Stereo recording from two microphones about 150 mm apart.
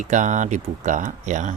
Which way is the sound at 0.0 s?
55° right (ahead or behind).